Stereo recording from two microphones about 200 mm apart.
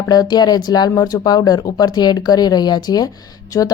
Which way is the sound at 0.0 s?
20° left (ahead or behind).